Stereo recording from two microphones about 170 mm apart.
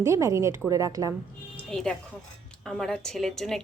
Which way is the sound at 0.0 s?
15° right (ahead or behind).